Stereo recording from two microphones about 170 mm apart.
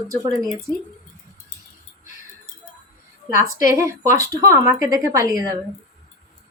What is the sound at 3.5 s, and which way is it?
Speech, 15° right (ahead or behind).